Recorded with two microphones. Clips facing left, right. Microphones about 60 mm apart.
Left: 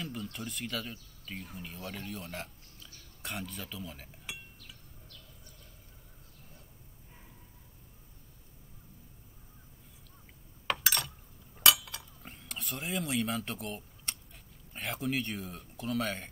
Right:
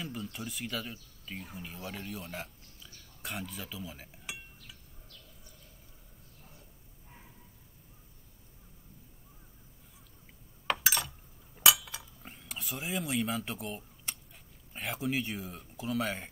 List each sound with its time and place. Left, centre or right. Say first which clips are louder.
0.2 s speech: even; centre
10.7 s a sound: right 1 dB; centre
14.7 s speech: even; centre